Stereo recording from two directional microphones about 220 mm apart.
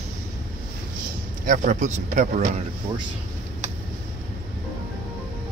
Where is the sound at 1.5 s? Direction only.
35° right (ahead or behind).